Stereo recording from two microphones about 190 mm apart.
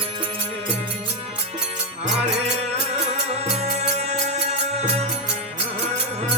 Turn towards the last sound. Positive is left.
turn(degrees=-30)  # may be behind; listen again after turning